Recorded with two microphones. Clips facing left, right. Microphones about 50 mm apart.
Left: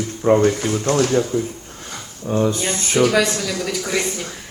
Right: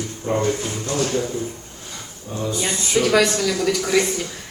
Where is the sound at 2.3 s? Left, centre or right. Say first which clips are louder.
Left 5 dB; left.